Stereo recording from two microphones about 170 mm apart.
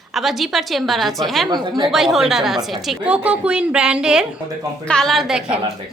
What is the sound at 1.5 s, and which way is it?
Speech, 25° right (ahead or behind).